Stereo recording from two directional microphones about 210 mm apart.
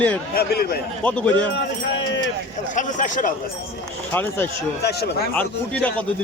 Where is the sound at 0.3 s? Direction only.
45° left (ahead or behind).